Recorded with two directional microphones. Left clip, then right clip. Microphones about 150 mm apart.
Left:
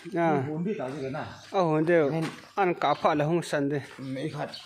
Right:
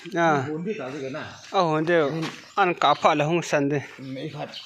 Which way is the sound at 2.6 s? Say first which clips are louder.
Right 5 dB; centre (ahead or behind).